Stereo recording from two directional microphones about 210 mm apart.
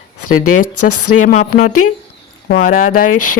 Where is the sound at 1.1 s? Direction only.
35° left (ahead or behind).